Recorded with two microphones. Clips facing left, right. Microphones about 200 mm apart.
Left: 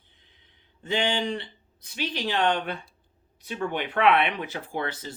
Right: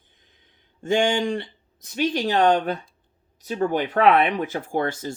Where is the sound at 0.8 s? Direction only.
45° right (ahead or behind).